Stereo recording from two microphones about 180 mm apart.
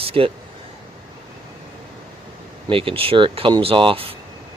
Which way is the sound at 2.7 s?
30° right (ahead or behind).